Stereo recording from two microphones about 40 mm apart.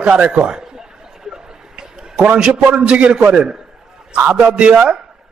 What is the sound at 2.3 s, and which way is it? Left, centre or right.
A man's voice, right.